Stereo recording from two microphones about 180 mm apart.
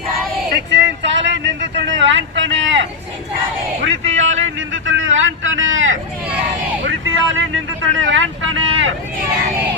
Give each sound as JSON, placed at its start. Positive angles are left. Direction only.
{"t": 0.7, "sound": "a sound", "side_deg": -90}
{"t": 6.8, "sound": "vehicle", "side_deg": -90}
{"t": 7.9, "sound": "speech", "side_deg": -90}